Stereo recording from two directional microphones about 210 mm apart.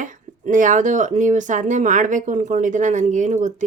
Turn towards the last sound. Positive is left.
turn(degrees=-35)  # may be behind; listen again after turning